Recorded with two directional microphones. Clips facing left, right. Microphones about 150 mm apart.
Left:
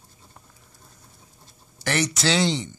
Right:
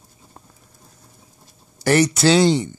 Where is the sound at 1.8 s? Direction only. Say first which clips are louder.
Right 9 dB; 45° right (ahead or behind).